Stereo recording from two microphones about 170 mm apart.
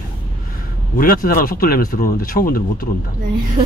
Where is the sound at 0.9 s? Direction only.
55° left (ahead or behind).